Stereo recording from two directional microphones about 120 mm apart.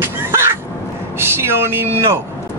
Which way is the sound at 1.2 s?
20° right (ahead or behind).